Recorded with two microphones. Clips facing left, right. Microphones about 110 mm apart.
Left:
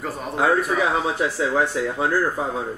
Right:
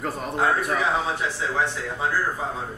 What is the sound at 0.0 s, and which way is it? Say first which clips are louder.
A man's voice: left 2 dB; centre (ahead or behind).